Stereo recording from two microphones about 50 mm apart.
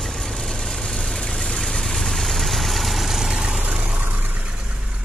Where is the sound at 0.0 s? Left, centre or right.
Centre.